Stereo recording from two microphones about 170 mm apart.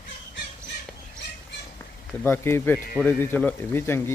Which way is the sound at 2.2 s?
15° left (ahead or behind).